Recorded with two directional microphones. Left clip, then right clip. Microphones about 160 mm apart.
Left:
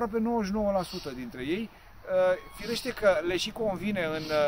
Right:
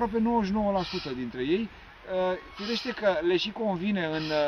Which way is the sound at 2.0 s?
5° left (ahead or behind).